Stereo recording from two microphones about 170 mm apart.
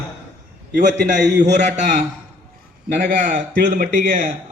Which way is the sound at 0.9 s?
90° right.